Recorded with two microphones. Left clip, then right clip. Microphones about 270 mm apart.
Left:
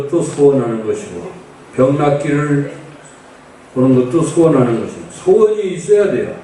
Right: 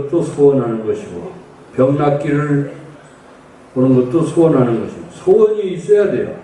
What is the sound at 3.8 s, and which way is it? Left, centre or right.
Speech, right.